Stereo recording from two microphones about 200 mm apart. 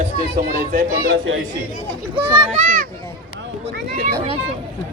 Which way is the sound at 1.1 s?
75° right (ahead or behind).